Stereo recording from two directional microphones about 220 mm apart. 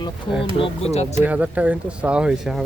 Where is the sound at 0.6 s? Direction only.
30° left (ahead or behind).